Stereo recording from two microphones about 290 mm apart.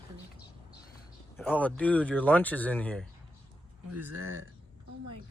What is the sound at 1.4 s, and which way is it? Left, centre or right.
Speech, centre.